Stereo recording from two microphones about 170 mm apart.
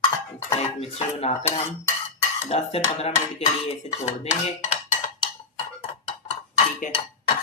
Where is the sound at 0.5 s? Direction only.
35° left (ahead or behind).